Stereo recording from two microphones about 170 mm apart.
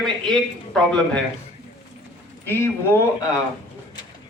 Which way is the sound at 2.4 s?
15° left (ahead or behind).